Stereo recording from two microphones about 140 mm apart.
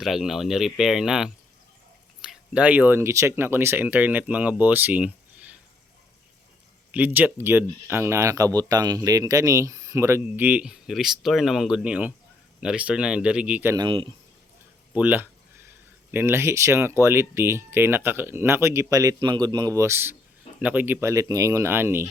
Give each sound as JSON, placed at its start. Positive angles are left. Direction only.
{"t": 0.0, "sound": "speech", "side_deg": 0}
{"t": 6.9, "sound": "speech", "side_deg": -10}
{"t": 13.7, "sound": "speech", "side_deg": -35}
{"t": 14.9, "sound": "a sound", "side_deg": -10}
{"t": 16.1, "sound": "speech", "side_deg": -15}